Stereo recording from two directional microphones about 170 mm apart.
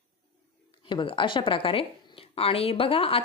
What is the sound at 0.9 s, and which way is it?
A woman's voice, 30° left (ahead or behind).